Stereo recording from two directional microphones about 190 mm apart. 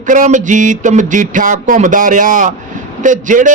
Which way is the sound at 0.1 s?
40° right (ahead or behind).